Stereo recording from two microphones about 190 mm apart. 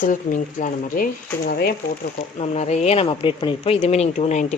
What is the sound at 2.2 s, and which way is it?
Speech, 35° left (ahead or behind).